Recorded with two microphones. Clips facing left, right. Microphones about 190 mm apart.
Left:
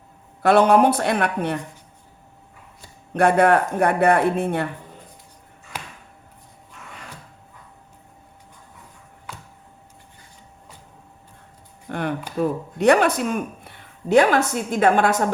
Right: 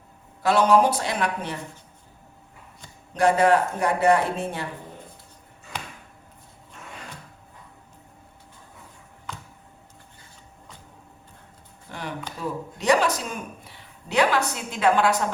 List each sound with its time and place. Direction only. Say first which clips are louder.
0.4 s speech: left 4 dB; 60° left (ahead or behind)
3.1 s speech: left 3 dB; 55° left (ahead or behind)
11.9 s speech: left 8 dB; 60° left (ahead or behind)